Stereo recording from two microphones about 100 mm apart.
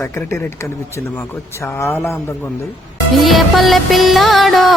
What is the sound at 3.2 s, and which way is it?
Music, centre (ahead or behind).